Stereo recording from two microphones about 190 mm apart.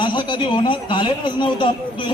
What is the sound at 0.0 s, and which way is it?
Speech, 25° left (ahead or behind).